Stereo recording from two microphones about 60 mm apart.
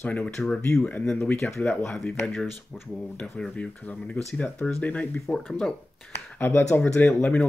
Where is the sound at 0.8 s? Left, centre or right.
Left.